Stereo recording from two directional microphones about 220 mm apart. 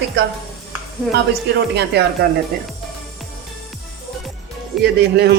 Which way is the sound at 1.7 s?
50° right (ahead or behind).